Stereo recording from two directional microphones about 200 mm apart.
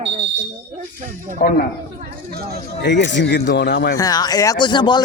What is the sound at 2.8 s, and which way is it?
A man's voice, 60° left (ahead or behind).